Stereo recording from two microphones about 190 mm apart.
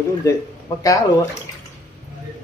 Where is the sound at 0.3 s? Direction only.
15° left (ahead or behind).